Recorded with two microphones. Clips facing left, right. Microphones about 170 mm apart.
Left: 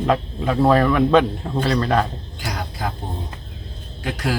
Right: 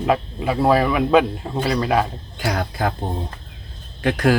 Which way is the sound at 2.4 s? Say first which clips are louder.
Right 5 dB; 60° right (ahead or behind).